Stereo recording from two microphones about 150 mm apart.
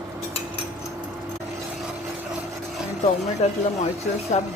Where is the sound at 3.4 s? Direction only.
50° left (ahead or behind).